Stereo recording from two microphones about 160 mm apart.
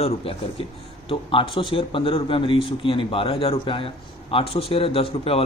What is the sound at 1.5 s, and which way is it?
A man's voice, 35° left (ahead or behind).